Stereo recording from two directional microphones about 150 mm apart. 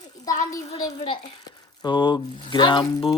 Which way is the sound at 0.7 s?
30° left (ahead or behind).